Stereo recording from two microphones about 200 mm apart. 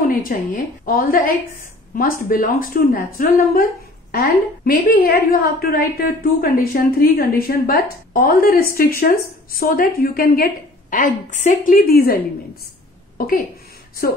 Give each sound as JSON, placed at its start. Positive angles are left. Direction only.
{"t": 0.3, "sound": "a woman's voice", "side_deg": 45}
{"t": 13.2, "sound": "a woman's voice", "side_deg": 45}